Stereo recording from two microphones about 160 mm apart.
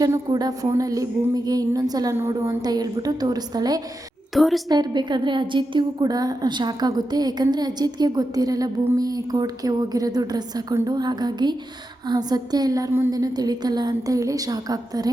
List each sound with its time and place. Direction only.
0.0 s a woman's voice: 25° right (ahead or behind)
4.4 s a woman's voice: centre (ahead or behind)
4.7 s a woman's voice: 25° right (ahead or behind)